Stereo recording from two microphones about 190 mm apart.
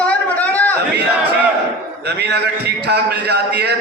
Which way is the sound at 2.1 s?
60° right (ahead or behind).